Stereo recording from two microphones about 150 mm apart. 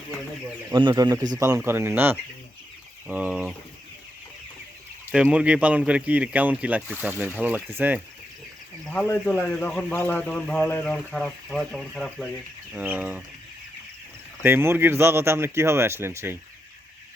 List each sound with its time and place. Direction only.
0.7 s a man's voice: 30° right (ahead or behind); by 3.5 s 10° right (ahead or behind)
5.1 s speech: 10° right (ahead or behind)
8.8 s speech: 10° left (ahead or behind)
12.7 s speech: 10° right (ahead or behind)
14.4 s speech: 15° right (ahead or behind)